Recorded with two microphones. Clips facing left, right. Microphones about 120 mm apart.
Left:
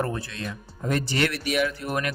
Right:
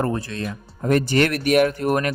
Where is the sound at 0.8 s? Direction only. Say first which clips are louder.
Right 7 dB; 50° right (ahead or behind).